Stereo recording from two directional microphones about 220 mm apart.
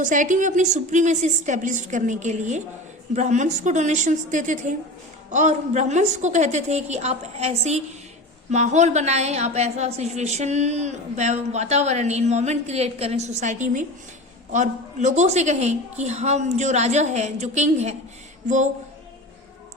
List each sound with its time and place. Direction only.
0.0 s a woman's voice: 35° right (ahead or behind)